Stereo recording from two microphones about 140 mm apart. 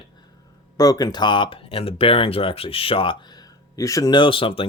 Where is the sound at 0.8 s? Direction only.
25° left (ahead or behind).